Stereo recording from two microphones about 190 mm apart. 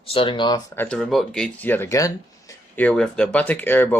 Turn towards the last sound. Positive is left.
turn(degrees=10)  # may be behind; listen again after turning